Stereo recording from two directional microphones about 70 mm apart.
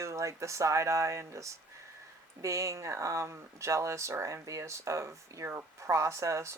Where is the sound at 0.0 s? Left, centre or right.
Right.